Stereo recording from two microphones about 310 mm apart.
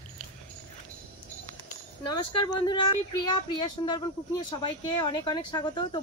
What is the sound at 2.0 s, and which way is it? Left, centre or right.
Speech, left.